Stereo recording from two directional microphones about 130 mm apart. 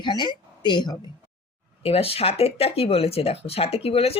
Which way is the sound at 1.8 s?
50° left (ahead or behind).